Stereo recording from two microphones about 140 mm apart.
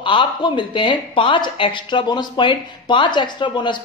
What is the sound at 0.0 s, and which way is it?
Speech, 35° left (ahead or behind).